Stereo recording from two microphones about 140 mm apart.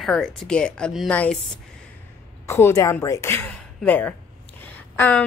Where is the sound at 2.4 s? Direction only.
20° left (ahead or behind).